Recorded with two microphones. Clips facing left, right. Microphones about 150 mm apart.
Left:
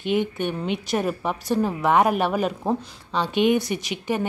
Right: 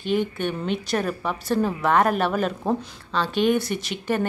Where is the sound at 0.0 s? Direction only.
15° left (ahead or behind).